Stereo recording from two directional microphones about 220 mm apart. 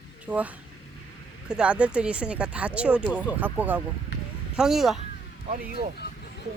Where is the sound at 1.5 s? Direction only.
5° right (ahead or behind).